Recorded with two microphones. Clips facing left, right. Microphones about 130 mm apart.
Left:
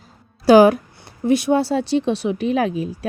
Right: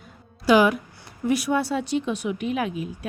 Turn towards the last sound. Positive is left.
turn(degrees=35)  # may be behind; listen again after turning